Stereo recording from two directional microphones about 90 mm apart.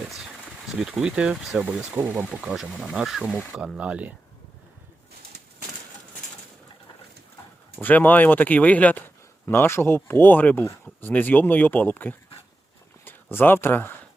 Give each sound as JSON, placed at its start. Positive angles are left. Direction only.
{"t": 0.0, "sound": "a sound", "side_deg": -5}
{"t": 0.8, "sound": "speech", "side_deg": -5}
{"t": 2.0, "sound": "speech", "side_deg": -25}
{"t": 2.3, "sound": "speech", "side_deg": -5}
{"t": 3.8, "sound": "speech", "side_deg": -15}
{"t": 7.8, "sound": "speech", "side_deg": 20}